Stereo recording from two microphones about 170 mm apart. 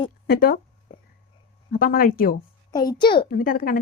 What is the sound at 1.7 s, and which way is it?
Speech, 60° left (ahead or behind).